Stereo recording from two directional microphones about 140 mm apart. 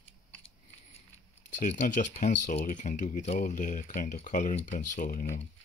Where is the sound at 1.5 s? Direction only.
70° left (ahead or behind).